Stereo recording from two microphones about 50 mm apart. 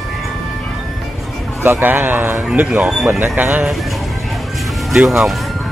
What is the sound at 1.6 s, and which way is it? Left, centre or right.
Speech, right.